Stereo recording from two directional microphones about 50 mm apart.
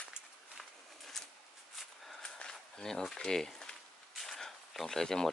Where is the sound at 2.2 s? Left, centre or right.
Centre.